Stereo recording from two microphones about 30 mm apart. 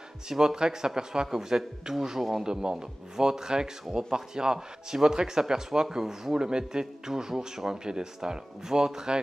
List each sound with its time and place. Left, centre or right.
0.3 s speech: right
2.4 s speech: right